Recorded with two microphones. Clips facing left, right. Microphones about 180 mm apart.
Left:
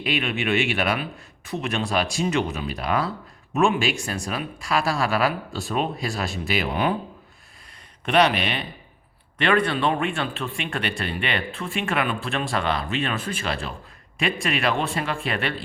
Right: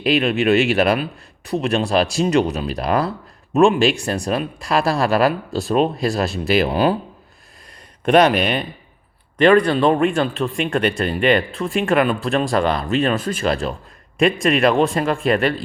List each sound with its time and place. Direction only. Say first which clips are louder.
0.0 s speech: right 8 dB; 40° right (ahead or behind)
8.0 s speech: right 6 dB; 45° right (ahead or behind)